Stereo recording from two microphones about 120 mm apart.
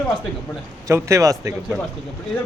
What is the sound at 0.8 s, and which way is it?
Speech, 25° right (ahead or behind).